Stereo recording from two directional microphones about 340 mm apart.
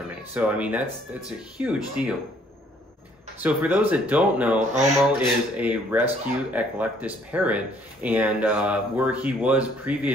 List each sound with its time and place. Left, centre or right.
0.3 s speech: centre
3.3 s speech: centre
4.6 s speech: right
5.6 s speech: centre